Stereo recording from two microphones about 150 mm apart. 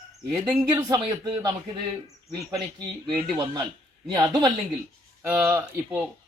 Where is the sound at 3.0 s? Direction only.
30° right (ahead or behind).